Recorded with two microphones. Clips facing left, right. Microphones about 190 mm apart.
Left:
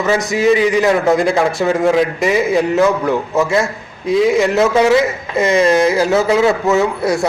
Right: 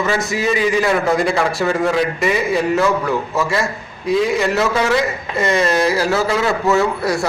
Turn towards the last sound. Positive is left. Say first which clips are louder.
# left 2 dB
turn(degrees=20)  # may be behind; listen again after turning